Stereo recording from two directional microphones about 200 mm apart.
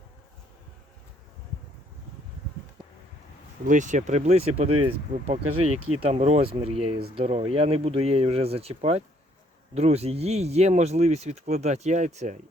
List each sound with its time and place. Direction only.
3.7 s speech: 40° right (ahead or behind)